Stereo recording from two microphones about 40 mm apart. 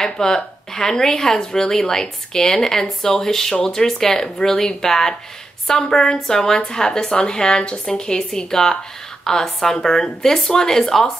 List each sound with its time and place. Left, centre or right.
0.0 s speech: centre